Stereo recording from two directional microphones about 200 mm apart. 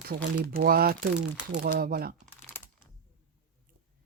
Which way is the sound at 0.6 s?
50° right (ahead or behind).